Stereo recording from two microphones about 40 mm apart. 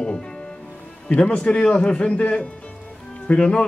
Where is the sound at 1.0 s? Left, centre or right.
Left.